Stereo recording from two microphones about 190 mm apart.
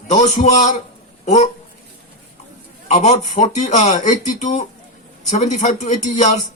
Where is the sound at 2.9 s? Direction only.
40° left (ahead or behind).